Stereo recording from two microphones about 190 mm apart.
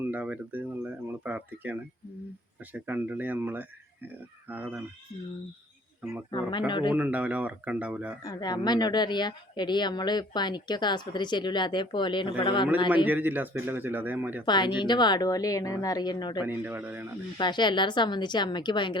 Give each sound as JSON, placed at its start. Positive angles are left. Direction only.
{"t": 0.0, "sound": "speech", "side_deg": -10}
{"t": 6.7, "sound": "speech", "side_deg": 25}
{"t": 6.9, "sound": "speech", "side_deg": -10}
{"t": 8.2, "sound": "speech", "side_deg": 20}
{"t": 13.1, "sound": "speech", "side_deg": -10}
{"t": 14.4, "sound": "speech", "side_deg": 25}
{"t": 16.5, "sound": "speech", "side_deg": -10}
{"t": 17.3, "sound": "speech", "side_deg": 25}